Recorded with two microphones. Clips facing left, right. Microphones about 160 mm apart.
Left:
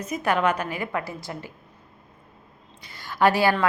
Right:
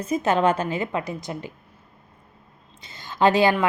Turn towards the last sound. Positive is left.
turn(degrees=-20)  # may be behind; listen again after turning